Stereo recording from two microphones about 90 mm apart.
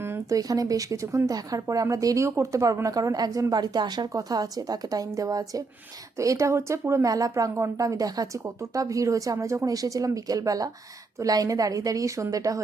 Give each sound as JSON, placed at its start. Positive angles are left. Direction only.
{"t": 0.3, "sound": "speech", "side_deg": -40}